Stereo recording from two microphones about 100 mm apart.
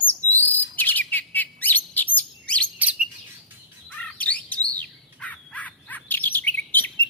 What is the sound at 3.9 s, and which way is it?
Bird, 15° left (ahead or behind).